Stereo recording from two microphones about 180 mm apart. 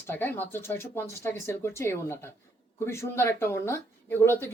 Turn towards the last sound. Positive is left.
turn(degrees=10)  # may be behind; listen again after turning